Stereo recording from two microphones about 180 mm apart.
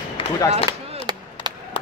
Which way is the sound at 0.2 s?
30° left (ahead or behind).